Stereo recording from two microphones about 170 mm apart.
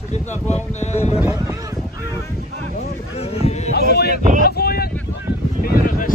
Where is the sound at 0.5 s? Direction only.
40° left (ahead or behind).